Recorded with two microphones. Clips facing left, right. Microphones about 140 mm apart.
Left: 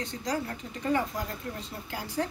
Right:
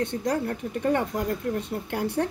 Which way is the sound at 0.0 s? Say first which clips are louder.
Right 6 dB; 60° right (ahead or behind).